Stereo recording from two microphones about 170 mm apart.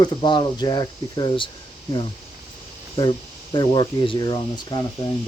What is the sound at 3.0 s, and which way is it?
Speech, 25° left (ahead or behind).